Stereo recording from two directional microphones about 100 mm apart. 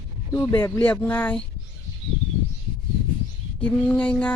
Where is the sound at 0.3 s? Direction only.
25° left (ahead or behind).